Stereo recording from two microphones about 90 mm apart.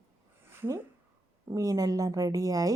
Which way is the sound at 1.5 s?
40° right (ahead or behind).